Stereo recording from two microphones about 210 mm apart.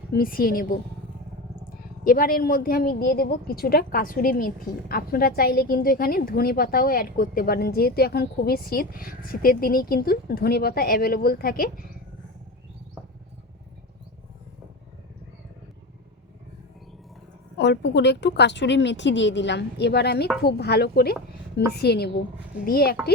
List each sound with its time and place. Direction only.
0.1 s a woman's voice: 45° left (ahead or behind)
2.0 s a woman's voice: 45° left (ahead or behind)
17.6 s a woman's voice: 55° left (ahead or behind)